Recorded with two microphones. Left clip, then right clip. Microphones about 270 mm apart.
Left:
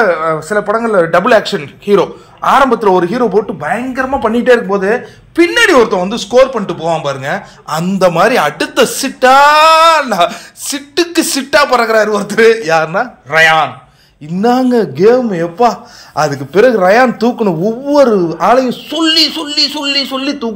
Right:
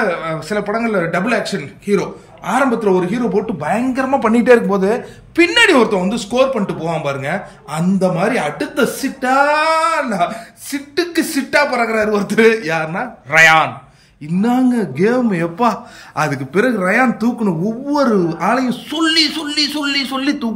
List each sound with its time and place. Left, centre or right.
0.5 s speech: centre
1.2 s a man's voice: centre
3.3 s speech: centre
5.3 s speech: centre
13.3 s speech: centre
14.2 s speech: centre